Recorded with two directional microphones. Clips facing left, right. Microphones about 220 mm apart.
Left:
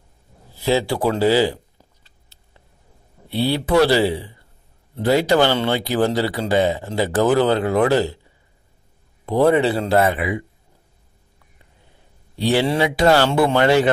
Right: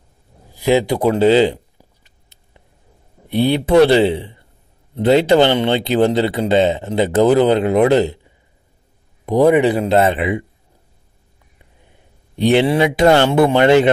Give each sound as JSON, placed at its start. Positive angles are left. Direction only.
{"t": 0.6, "sound": "speech", "side_deg": -20}
{"t": 2.0, "sound": "a sound", "side_deg": -20}
{"t": 3.3, "sound": "speech", "side_deg": -15}
{"t": 12.4, "sound": "speech", "side_deg": -20}